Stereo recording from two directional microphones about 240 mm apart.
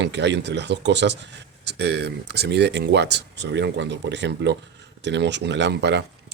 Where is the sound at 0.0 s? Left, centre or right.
Right.